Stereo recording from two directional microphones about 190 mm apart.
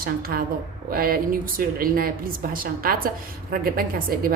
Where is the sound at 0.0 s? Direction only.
50° right (ahead or behind).